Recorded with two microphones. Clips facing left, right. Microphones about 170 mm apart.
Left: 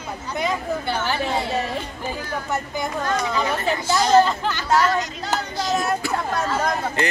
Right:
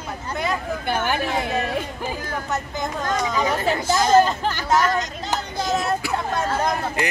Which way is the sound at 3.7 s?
45° right (ahead or behind).